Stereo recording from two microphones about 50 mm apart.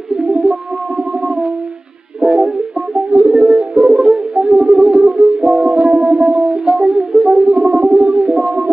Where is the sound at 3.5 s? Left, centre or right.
Right.